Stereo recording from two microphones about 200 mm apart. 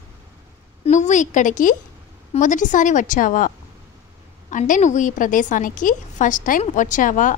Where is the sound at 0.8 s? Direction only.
35° left (ahead or behind).